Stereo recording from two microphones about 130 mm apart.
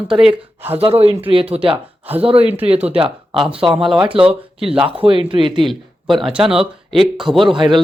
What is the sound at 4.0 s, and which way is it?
Speech, 40° right (ahead or behind).